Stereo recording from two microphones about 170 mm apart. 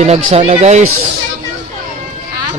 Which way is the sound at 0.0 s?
35° right (ahead or behind).